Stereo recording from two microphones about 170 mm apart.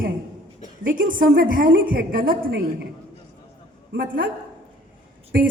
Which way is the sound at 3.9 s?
80° right.